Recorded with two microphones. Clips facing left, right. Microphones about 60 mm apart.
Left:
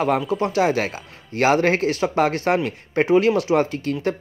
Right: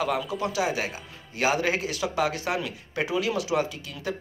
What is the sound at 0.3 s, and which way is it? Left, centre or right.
A man's voice, left.